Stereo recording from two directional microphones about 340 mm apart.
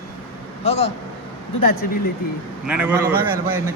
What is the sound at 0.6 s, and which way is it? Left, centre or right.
Speech, centre.